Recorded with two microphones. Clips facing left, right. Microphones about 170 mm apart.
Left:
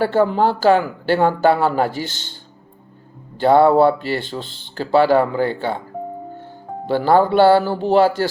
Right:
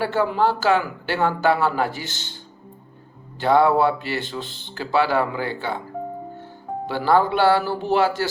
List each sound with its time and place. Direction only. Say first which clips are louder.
0.0 s speech: left 4 dB; 30° left (ahead or behind)
3.4 s speech: left 5 dB; 30° left (ahead or behind)
6.8 s speech: left 4 dB; 30° left (ahead or behind)